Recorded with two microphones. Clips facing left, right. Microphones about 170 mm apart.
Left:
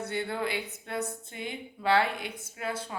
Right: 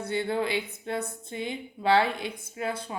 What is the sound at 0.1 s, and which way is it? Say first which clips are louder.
A woman's voice: right 6 dB; 20° right (ahead or behind).